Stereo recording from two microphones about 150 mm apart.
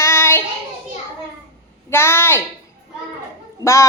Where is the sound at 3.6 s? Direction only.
20° left (ahead or behind).